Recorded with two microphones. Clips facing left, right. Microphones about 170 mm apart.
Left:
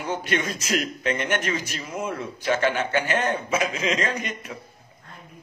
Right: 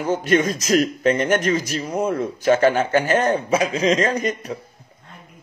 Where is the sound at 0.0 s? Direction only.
40° right (ahead or behind).